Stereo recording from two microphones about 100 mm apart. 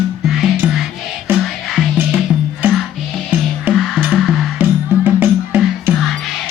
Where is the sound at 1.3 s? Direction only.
20° right (ahead or behind).